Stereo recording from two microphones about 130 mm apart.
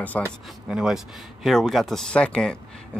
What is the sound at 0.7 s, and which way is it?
Speech, 5° right (ahead or behind).